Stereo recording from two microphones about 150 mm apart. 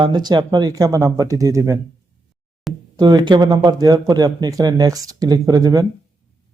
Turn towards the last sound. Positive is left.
turn(degrees=-25)  # may be behind; listen again after turning